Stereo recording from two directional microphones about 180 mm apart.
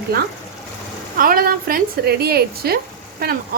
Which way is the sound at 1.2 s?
50° right (ahead or behind).